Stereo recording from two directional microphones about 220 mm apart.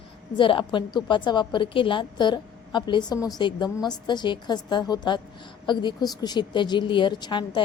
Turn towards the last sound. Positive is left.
turn(degrees=20)  # may be behind; listen again after turning